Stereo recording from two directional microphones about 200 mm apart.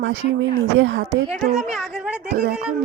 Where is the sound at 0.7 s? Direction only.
75° right (ahead or behind).